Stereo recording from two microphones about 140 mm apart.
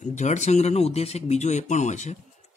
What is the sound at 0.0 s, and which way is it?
Speech, 55° left (ahead or behind).